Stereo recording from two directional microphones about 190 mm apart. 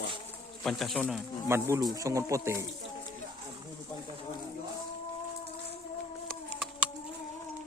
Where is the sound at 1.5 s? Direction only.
15° right (ahead or behind).